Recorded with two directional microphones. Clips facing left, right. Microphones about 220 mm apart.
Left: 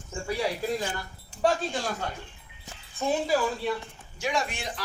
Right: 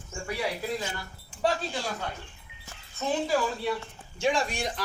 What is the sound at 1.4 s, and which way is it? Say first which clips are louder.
Speech: left 2 dB; 45° left (ahead or behind).